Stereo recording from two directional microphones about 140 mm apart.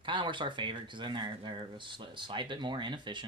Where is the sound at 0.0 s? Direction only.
35° right (ahead or behind).